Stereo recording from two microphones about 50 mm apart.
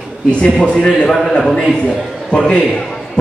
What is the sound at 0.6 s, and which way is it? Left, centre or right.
Speech, left.